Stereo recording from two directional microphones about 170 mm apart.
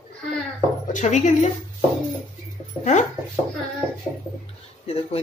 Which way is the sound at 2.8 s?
45° left (ahead or behind).